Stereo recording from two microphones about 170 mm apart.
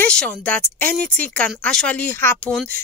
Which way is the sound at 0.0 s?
5° left (ahead or behind).